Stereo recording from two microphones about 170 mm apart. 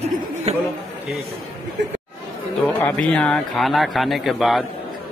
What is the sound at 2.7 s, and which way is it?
A man's voice, 10° left (ahead or behind).